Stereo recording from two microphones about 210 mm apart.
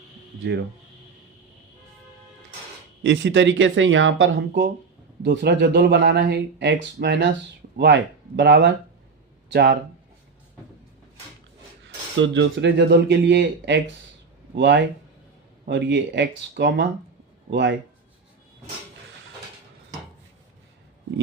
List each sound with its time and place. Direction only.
3.0 s speech: 60° right (ahead or behind)
12.1 s speech: 60° right (ahead or behind)